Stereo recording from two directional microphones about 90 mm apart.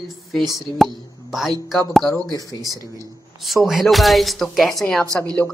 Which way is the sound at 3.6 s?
Centre (ahead or behind).